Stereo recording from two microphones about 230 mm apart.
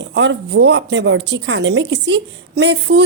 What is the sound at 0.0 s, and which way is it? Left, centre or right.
A woman's voice, right.